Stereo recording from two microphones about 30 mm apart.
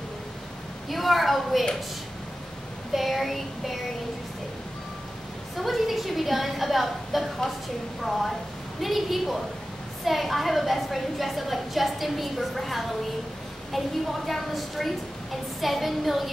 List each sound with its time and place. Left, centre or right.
0.8 s a woman's voice: centre
2.9 s child singing: centre
5.6 s a woman's voice: centre